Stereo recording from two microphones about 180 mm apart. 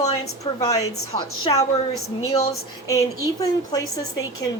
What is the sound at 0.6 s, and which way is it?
A woman's voice, 20° left (ahead or behind).